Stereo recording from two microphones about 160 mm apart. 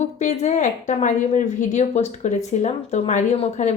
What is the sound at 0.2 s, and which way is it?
A woman's voice, 50° left (ahead or behind).